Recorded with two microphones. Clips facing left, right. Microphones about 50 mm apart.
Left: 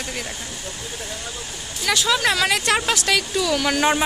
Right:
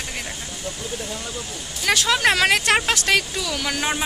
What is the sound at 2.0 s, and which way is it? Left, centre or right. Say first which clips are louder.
A woman's voice: right 2 dB; right.